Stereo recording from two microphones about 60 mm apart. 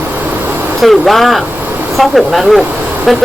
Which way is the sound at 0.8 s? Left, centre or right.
Centre.